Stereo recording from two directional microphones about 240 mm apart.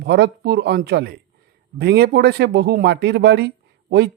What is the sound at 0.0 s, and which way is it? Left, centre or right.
Speech, right.